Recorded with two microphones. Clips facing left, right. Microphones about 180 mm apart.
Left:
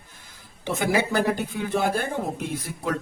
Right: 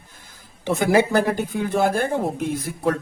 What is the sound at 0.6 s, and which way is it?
Speech, 45° right (ahead or behind).